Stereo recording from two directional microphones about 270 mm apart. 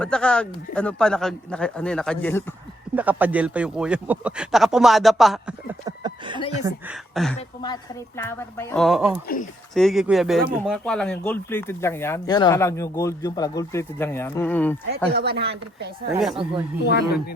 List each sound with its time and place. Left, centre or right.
0.0 s speech: centre
2.9 s speech: centre
5.8 s a sound: centre
6.6 s speech: centre
7.3 s speech: centre
9.2 s speech: left
9.7 s speech: centre
15.1 s speech: right
16.1 s speech: centre
16.8 s speech: left